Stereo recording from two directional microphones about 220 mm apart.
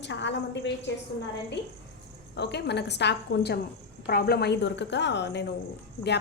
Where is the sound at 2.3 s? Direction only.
50° left (ahead or behind).